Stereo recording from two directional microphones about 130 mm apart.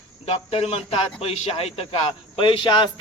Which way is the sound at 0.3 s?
50° left (ahead or behind).